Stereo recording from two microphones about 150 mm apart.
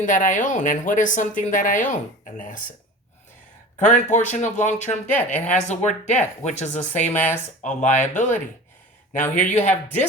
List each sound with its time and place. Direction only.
0.0 s speech: 60° left (ahead or behind)
3.8 s speech: 55° left (ahead or behind)
5.1 s a woman's voice: 10° left (ahead or behind)
5.5 s speech: 50° left (ahead or behind)
6.9 s a woman's voice: 10° left (ahead or behind)
7.6 s speech: 55° left (ahead or behind)
9.5 s speech: 50° left (ahead or behind)